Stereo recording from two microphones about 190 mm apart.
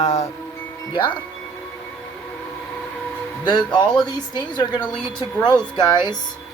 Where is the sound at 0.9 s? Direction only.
25° left (ahead or behind).